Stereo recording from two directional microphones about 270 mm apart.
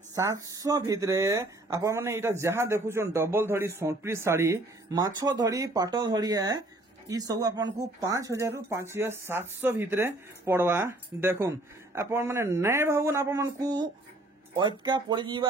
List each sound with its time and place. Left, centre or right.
0.1 s speech: centre
14.9 s speech: centre